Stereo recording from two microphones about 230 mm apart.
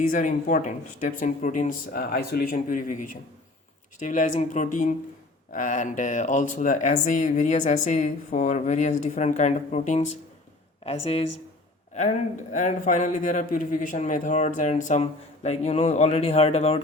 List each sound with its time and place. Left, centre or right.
0.1 s speech: left